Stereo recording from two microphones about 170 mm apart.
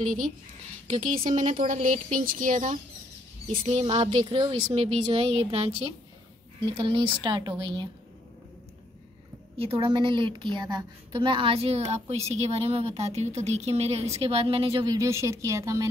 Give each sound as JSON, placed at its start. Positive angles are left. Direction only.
{"t": 0.0, "sound": "speech", "side_deg": -50}
{"t": 3.5, "sound": "a woman's voice", "side_deg": -35}
{"t": 6.8, "sound": "speech", "side_deg": -30}
{"t": 9.6, "sound": "a woman's voice", "side_deg": -35}
{"t": 15.0, "sound": "speech", "side_deg": -15}